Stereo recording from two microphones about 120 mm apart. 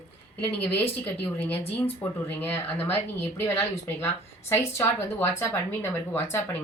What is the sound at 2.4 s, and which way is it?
A woman's voice, 15° left (ahead or behind).